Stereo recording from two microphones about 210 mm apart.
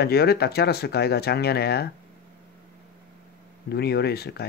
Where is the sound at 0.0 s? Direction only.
50° left (ahead or behind).